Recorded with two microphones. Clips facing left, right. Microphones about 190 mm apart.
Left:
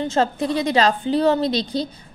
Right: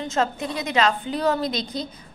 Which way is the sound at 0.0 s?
30° left (ahead or behind).